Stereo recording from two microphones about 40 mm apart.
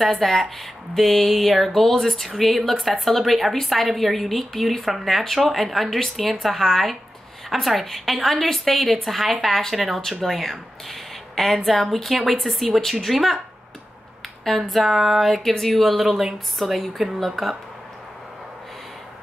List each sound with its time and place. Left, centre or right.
0.1 s speech: centre
14.7 s speech: centre